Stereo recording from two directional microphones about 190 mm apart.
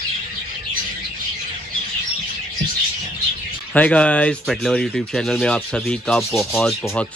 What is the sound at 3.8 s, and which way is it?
Speech, 5° left (ahead or behind).